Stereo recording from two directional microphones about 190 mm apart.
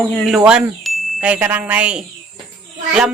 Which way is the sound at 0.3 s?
Centre (ahead or behind).